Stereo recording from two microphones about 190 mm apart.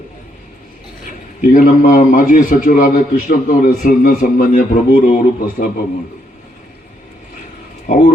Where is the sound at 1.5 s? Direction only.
45° left (ahead or behind).